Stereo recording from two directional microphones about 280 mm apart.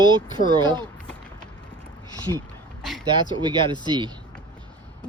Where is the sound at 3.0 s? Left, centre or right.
Centre.